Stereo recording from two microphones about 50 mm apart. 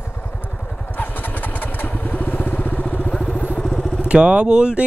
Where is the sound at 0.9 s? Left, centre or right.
Left.